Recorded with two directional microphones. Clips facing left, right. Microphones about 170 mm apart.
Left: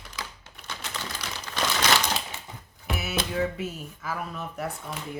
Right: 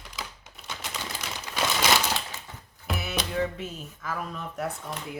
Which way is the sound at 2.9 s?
5° left (ahead or behind).